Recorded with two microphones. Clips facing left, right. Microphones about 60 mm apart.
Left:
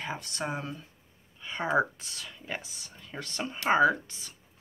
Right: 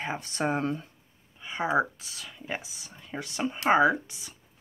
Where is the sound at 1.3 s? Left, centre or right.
Centre.